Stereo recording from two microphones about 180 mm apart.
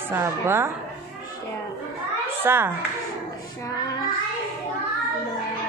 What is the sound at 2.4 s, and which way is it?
Speech, 15° right (ahead or behind).